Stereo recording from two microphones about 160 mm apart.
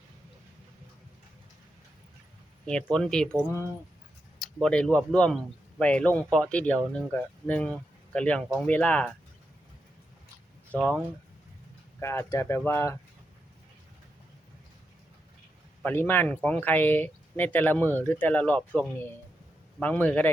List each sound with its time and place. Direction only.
2.6 s speech: 5° left (ahead or behind)
10.7 s speech: 5° left (ahead or behind)
11.9 s speech: 15° left (ahead or behind)
15.8 s speech: 10° left (ahead or behind)